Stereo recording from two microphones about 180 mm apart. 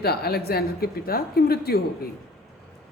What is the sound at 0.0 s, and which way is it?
A woman's voice, 60° left (ahead or behind).